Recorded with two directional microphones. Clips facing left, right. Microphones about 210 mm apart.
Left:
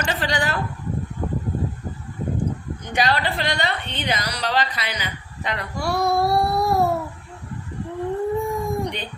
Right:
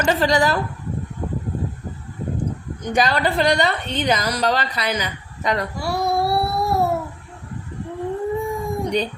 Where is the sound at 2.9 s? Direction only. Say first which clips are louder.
Right 3 dB; 45° right (ahead or behind).